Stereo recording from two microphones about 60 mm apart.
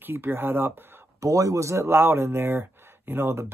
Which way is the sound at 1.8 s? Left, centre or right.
Right.